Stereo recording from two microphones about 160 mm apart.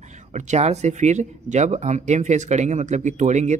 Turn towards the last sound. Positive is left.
turn(degrees=-45)  # may be behind; listen again after turning